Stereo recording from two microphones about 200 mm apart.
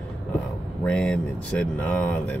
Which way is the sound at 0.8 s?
5° left (ahead or behind).